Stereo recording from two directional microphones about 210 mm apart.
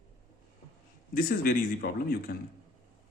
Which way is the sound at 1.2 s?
45° left (ahead or behind).